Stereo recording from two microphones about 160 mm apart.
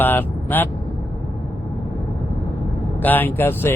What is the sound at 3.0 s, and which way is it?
Speech, 10° left (ahead or behind).